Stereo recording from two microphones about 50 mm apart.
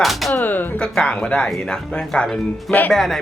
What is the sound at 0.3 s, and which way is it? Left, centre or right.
Music, left.